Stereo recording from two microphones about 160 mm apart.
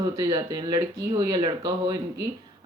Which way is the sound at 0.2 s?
25° right (ahead or behind).